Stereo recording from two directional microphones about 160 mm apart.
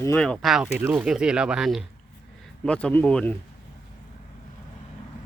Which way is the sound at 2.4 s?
5° left (ahead or behind).